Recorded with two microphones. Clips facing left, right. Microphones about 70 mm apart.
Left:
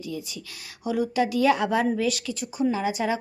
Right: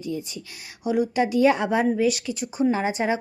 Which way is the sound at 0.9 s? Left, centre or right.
Right.